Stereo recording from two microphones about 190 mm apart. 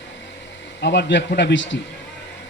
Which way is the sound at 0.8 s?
65° left (ahead or behind).